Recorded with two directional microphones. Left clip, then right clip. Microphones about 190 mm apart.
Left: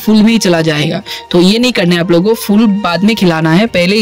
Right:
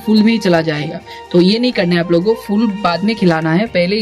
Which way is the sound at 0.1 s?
40° left (ahead or behind).